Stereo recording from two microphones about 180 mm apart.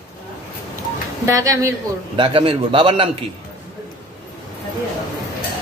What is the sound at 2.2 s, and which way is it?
A man's voice, 30° right (ahead or behind).